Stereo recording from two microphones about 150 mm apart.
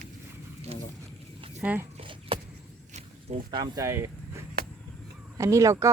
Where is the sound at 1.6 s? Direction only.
10° right (ahead or behind).